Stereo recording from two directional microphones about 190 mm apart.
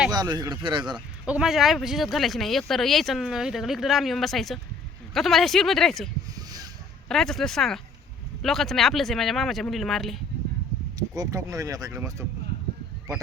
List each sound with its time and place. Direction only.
0.1 s speech: 20° right (ahead or behind)
1.2 s speech: 5° right (ahead or behind)
6.3 s a sound: 20° right (ahead or behind)
7.1 s speech: centre (ahead or behind)
10.9 s speech: 20° right (ahead or behind)